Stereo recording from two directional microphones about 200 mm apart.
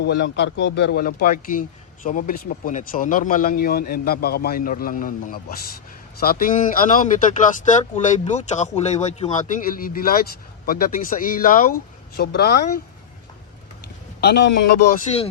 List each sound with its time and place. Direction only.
0.0 s a man's voice: 60° left (ahead or behind)
14.2 s a man's voice: 55° left (ahead or behind)
14.9 s a man's voice: 30° left (ahead or behind)